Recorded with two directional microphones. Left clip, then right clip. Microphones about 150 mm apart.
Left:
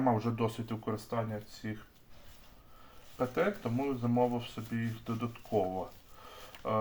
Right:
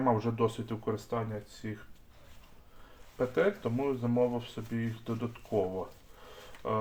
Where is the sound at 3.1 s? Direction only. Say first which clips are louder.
Right 3 dB; 30° right (ahead or behind).